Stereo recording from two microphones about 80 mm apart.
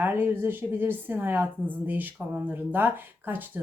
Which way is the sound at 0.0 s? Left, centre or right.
Right.